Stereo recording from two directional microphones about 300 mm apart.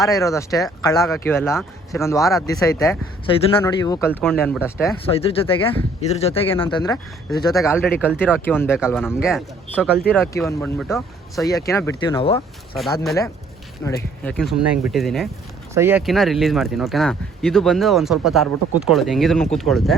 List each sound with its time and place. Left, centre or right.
0.2 s speech: centre
5.0 s speech: centre
7.5 s speech: centre